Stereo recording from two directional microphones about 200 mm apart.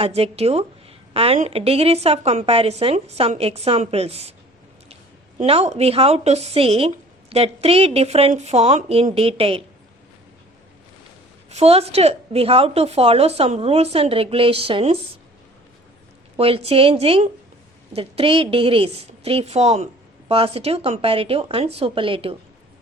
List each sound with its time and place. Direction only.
0.0 s a woman's voice: 30° right (ahead or behind)
5.4 s a woman's voice: 30° right (ahead or behind)
11.5 s a woman's voice: 30° right (ahead or behind)
16.4 s a woman's voice: 30° right (ahead or behind)